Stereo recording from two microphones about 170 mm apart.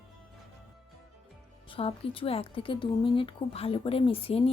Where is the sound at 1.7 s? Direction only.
35° left (ahead or behind).